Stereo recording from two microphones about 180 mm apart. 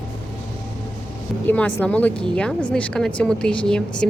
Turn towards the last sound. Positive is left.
turn(degrees=5)  # may be behind; listen again after turning